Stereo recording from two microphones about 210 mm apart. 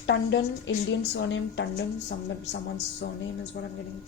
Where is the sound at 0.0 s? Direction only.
55° left (ahead or behind).